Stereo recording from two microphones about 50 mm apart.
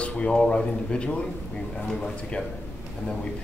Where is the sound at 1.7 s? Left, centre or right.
Centre.